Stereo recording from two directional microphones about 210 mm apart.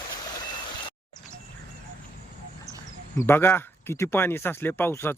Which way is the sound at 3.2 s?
10° left (ahead or behind).